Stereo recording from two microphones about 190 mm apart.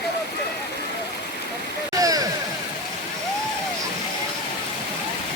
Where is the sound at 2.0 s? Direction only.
20° right (ahead or behind).